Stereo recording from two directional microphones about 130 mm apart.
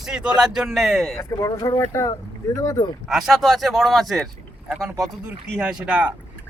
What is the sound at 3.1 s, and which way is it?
Speech, centre (ahead or behind).